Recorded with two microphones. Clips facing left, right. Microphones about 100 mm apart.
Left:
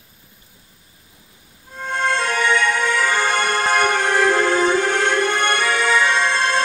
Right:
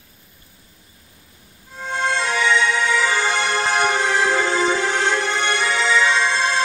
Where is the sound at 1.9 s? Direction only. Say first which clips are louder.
Left 1 dB; 50° left (ahead or behind).